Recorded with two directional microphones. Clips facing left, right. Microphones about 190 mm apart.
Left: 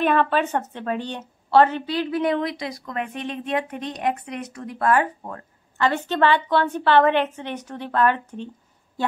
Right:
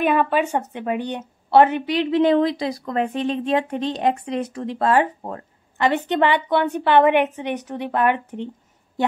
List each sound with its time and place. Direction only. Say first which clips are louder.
0.0 s a woman's voice: right 1 dB; 10° right (ahead or behind)